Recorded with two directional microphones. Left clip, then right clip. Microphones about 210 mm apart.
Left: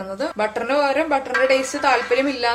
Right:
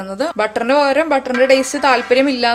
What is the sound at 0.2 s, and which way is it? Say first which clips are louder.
A woman's voice: right 5 dB; 45° right (ahead or behind).